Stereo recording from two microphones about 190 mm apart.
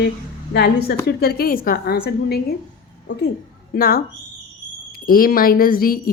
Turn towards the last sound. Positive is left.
turn(degrees=50)  # may be behind; listen again after turning